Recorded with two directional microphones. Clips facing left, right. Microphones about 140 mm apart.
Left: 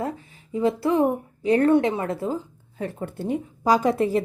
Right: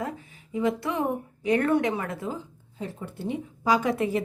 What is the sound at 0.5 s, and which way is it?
Speech, 35° left (ahead or behind).